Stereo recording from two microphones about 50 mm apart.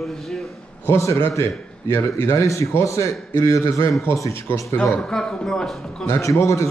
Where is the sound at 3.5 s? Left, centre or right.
Left.